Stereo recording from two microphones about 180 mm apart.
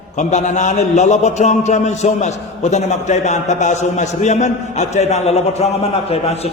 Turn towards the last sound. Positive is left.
turn(degrees=35)  # may be behind; listen again after turning